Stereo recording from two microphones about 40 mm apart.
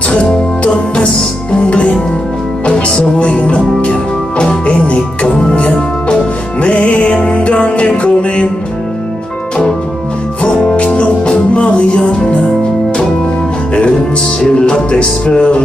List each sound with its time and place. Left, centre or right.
0.1 s music: left
2.7 s music: centre
3.2 s music: left
10.8 s music: left
14.6 s music: left